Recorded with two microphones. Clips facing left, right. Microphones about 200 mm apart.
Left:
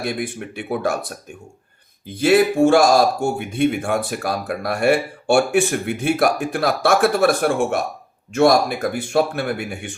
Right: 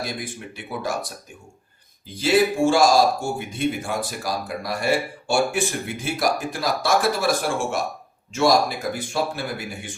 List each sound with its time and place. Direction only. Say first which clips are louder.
0.0 s speech: left 6 dB; 60° left (ahead or behind)
2.1 s speech: left 4 dB; 60° left (ahead or behind)